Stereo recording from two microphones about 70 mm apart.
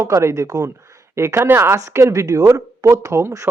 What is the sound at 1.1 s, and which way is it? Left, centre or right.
Speech, right.